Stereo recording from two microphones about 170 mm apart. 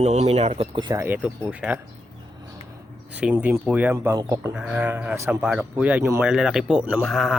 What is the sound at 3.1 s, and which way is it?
Speech, 10° right (ahead or behind).